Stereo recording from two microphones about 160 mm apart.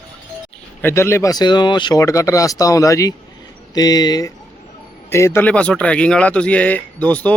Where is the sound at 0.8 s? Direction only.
15° left (ahead or behind).